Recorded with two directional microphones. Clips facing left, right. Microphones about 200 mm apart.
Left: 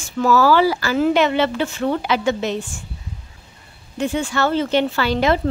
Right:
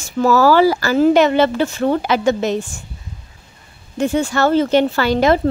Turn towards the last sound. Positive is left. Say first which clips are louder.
# right 4 dB
turn(degrees=-45)  # may be behind; listen again after turning